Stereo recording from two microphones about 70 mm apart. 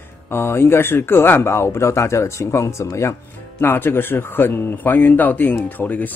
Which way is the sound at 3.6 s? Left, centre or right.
Left.